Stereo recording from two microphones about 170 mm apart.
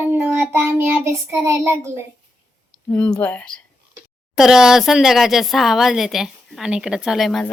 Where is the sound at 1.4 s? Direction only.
15° right (ahead or behind).